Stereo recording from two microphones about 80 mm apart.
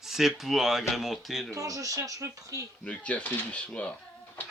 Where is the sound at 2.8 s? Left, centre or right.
Centre.